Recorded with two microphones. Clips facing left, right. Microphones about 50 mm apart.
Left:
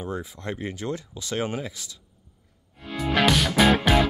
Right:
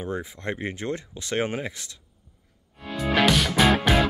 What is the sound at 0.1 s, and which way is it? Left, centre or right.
Speech, right.